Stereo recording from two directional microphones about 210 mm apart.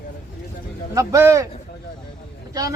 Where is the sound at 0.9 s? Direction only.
15° right (ahead or behind).